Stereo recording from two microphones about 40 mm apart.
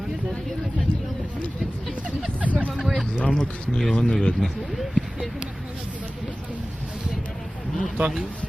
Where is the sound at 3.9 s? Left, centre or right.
Left.